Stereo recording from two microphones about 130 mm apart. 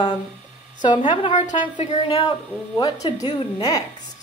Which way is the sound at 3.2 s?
30° left (ahead or behind).